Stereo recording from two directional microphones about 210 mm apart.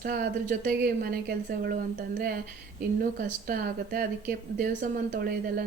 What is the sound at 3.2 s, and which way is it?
Speech, 40° right (ahead or behind).